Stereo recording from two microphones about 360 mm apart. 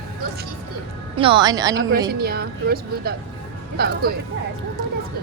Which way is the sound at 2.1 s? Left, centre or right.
Right.